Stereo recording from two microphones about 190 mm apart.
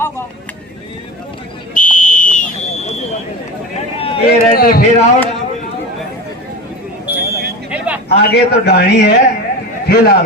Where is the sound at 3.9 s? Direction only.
30° left (ahead or behind).